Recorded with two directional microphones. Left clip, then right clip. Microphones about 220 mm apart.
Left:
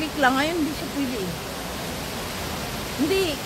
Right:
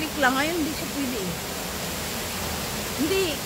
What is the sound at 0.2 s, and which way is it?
Speech, 15° left (ahead or behind).